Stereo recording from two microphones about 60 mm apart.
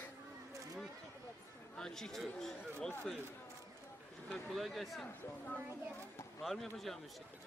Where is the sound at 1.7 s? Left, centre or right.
Centre.